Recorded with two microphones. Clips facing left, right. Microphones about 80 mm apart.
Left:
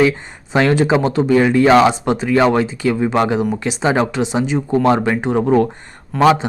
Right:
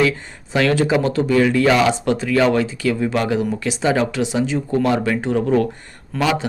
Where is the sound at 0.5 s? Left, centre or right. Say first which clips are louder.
Left 3 dB; left.